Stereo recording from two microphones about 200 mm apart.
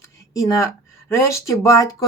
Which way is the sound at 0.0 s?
15° left (ahead or behind).